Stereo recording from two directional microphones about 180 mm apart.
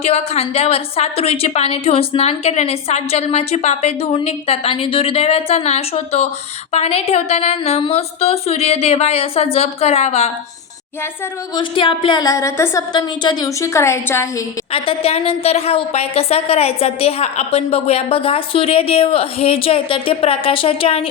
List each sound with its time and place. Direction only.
0.0 s a woman's voice: 35° left (ahead or behind)
11.5 s a woman's voice: 30° left (ahead or behind)
14.7 s a woman's voice: 30° left (ahead or behind)